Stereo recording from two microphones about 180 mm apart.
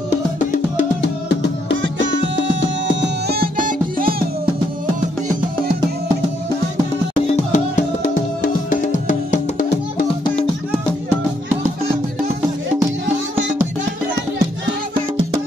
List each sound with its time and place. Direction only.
1.8 s music: 90° right
3.0 s music: 60° right (ahead or behind)
7.2 s music: 40° left (ahead or behind)